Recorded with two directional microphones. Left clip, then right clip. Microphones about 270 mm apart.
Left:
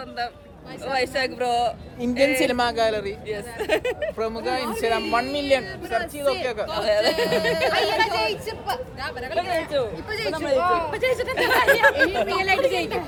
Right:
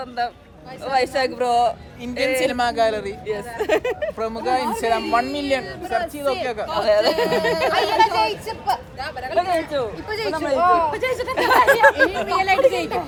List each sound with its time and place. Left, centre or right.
0.2 s speech: centre
2.0 s a man's voice: left
2.5 s speech: centre
3.2 s speech: right
4.4 s speech: centre
6.7 s speech: right
10.1 s a woman's voice: centre
12.3 s a woman's voice: centre